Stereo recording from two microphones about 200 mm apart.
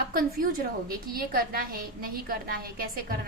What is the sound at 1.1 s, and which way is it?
A woman's voice, 45° right (ahead or behind).